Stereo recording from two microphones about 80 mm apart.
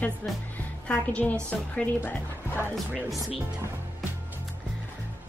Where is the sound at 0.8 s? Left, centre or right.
Centre.